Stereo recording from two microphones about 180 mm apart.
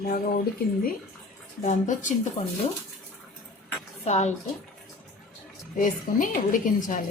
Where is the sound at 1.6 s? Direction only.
45° left (ahead or behind).